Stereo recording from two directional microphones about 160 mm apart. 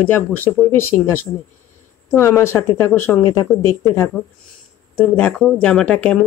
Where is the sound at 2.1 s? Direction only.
15° left (ahead or behind).